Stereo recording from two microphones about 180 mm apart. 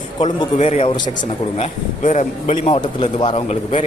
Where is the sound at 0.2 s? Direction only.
30° left (ahead or behind).